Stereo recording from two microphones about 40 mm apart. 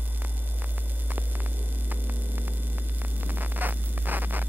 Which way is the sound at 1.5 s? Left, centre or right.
Right.